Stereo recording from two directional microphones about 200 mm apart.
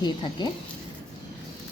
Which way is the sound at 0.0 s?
20° left (ahead or behind).